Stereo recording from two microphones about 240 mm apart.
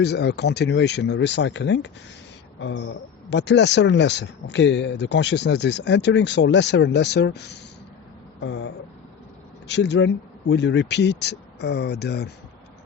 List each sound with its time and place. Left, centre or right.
0.0 s speech: left